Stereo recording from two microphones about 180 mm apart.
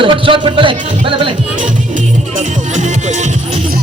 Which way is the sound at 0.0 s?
30° right (ahead or behind).